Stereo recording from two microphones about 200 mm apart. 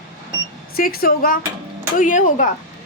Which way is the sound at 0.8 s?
45° left (ahead or behind).